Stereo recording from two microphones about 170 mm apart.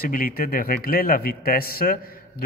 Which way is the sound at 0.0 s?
60° left (ahead or behind).